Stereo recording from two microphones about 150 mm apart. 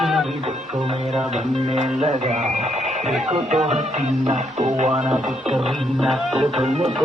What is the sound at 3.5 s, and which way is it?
Music, 50° right (ahead or behind).